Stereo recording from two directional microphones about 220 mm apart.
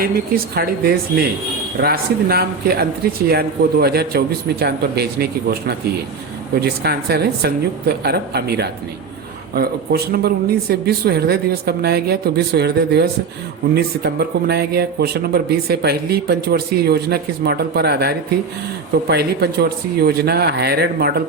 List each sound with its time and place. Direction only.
0.0 s speech: 45° right (ahead or behind)
1.8 s speech: 45° right (ahead or behind)